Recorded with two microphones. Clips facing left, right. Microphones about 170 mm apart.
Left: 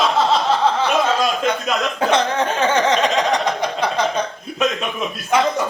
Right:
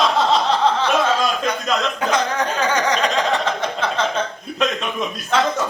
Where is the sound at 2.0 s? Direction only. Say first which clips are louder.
Left 3 dB; 30° left (ahead or behind).